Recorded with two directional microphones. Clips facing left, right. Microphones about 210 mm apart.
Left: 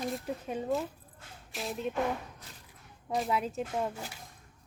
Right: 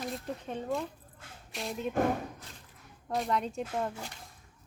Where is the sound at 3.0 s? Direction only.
5° left (ahead or behind).